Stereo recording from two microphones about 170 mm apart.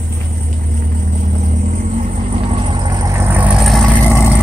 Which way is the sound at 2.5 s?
30° right (ahead or behind).